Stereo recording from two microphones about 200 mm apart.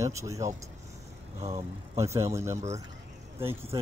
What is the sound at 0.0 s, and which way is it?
Speech, 15° right (ahead or behind).